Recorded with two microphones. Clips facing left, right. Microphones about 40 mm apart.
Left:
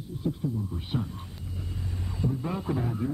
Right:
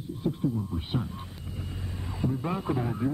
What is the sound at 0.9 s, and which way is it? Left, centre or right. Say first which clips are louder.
Speech: left 1 dB; centre.